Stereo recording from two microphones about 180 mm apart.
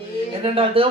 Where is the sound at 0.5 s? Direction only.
30° right (ahead or behind).